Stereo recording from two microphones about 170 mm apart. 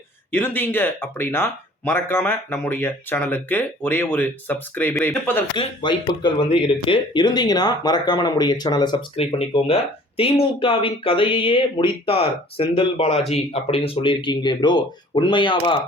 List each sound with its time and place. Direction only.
0.3 s speech: 10° left (ahead or behind)
5.5 s speech: 30° left (ahead or behind)